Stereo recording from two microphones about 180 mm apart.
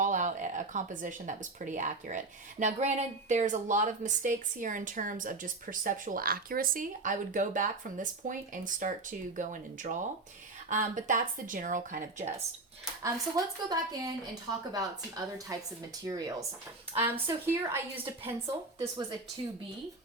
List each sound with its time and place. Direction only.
0.0 s speech: 45° right (ahead or behind)
13.0 s speech: 20° right (ahead or behind)